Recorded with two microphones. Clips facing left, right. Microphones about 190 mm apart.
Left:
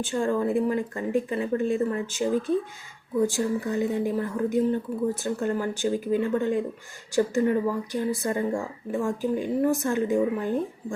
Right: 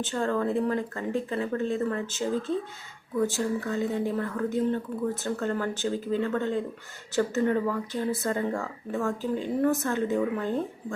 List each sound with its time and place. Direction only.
0.0 s speech: 10° left (ahead or behind)